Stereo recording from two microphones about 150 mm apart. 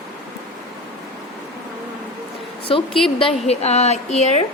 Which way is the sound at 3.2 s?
45° left (ahead or behind).